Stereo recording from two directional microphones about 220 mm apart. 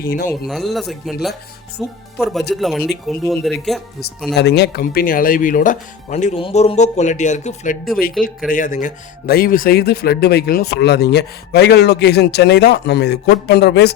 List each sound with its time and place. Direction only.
0.0 s speech: 45° left (ahead or behind)
0.3 s speech: centre (ahead or behind)
4.4 s speech: 50° left (ahead or behind)